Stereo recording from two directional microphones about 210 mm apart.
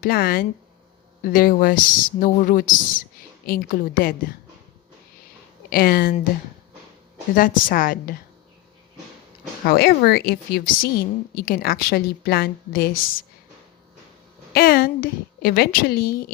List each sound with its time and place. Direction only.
0.0 s a woman's voice: 45° left (ahead or behind)
5.7 s a woman's voice: 45° left (ahead or behind)
7.3 s speech: 40° left (ahead or behind)
9.6 s a woman's voice: 45° left (ahead or behind)
14.5 s a woman's voice: 45° left (ahead or behind)